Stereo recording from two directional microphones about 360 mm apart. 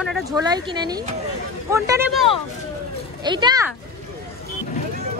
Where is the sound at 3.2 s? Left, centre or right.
Centre.